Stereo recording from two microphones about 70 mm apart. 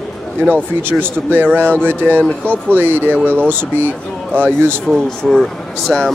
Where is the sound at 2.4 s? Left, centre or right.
Right.